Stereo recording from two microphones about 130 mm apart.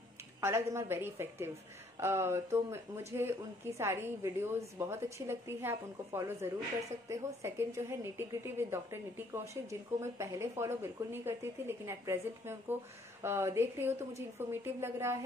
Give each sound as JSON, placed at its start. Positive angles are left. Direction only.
{"t": 0.4, "sound": "a woman's voice", "side_deg": -20}